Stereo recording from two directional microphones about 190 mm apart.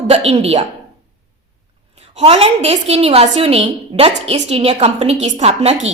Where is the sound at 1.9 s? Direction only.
35° right (ahead or behind).